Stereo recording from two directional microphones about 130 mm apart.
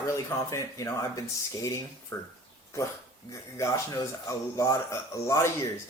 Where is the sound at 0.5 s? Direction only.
25° left (ahead or behind).